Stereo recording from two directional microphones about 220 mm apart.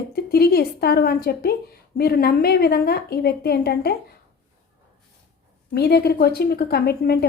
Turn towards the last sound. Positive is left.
turn(degrees=45)  # may be behind; listen again after turning